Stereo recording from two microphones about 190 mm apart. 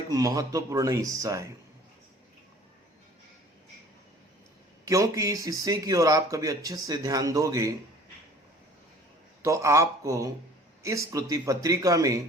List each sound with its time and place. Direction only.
0.1 s speech: 20° right (ahead or behind)
4.9 s speech: 15° right (ahead or behind)
9.4 s speech: 15° right (ahead or behind)